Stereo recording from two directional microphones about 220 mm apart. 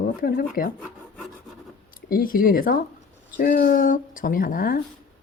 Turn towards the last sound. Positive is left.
turn(degrees=40)  # may be behind; listen again after turning